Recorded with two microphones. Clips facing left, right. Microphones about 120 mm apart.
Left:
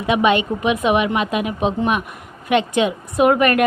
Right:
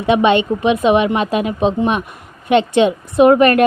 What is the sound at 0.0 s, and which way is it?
A woman's voice, 30° right (ahead or behind).